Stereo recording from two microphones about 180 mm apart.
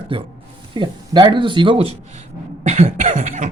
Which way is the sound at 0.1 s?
30° right (ahead or behind).